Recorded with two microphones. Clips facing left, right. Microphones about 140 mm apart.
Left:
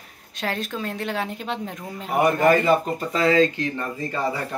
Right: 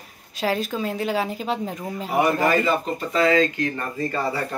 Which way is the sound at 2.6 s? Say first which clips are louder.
Left 3 dB; 40° left (ahead or behind).